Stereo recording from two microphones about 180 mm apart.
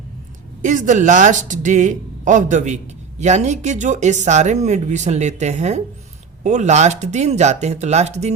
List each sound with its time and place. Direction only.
0.6 s a man's voice: 45° right (ahead or behind)